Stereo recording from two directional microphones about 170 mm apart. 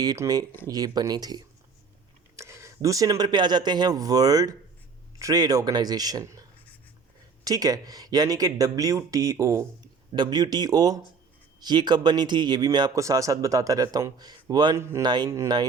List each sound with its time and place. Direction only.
0.0 s speech: 20° right (ahead or behind)
7.4 s speech: 20° right (ahead or behind)